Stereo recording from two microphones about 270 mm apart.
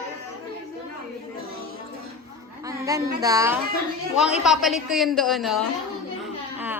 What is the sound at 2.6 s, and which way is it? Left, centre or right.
A woman's voice, centre.